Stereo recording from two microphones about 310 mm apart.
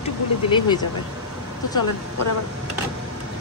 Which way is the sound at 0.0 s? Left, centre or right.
Centre.